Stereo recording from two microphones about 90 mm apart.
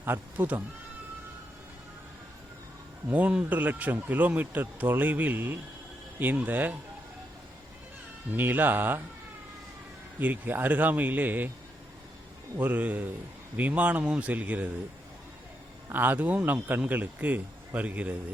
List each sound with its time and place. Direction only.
0.0 s speech: 20° right (ahead or behind)
3.1 s speech: 15° right (ahead or behind)
8.3 s speech: 20° right (ahead or behind)
10.2 s speech: 20° right (ahead or behind)
12.5 s speech: 15° right (ahead or behind)
15.9 s speech: 20° right (ahead or behind)